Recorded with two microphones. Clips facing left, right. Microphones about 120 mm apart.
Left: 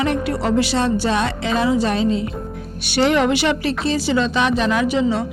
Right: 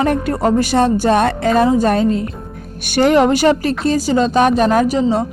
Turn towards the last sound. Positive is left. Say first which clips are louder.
# right 4 dB
turn(degrees=-40)  # may be behind; listen again after turning